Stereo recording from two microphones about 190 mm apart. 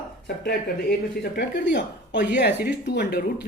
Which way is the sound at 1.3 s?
60° left (ahead or behind).